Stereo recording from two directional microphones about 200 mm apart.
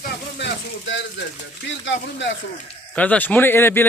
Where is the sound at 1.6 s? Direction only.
65° left (ahead or behind).